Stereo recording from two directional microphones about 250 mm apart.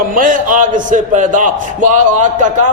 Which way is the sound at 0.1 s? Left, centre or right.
Right.